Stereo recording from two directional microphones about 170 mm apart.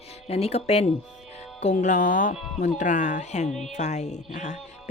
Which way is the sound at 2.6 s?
45° left (ahead or behind).